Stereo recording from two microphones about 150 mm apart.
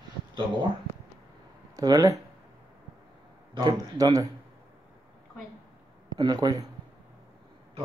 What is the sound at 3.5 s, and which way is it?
Speech, 25° right (ahead or behind).